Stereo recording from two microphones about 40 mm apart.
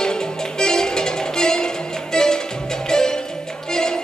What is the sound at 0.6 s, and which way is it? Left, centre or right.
Music, centre.